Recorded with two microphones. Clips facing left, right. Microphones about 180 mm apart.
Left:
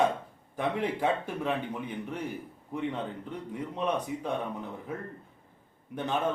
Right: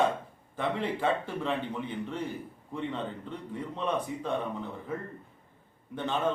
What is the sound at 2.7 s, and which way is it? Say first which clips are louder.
A man's voice: left 1 dB; 15° left (ahead or behind).